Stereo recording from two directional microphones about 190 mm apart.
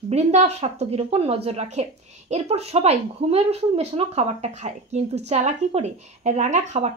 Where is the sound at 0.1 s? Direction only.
35° right (ahead or behind).